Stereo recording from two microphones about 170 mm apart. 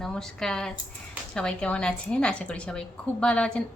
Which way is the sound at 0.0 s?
5° left (ahead or behind).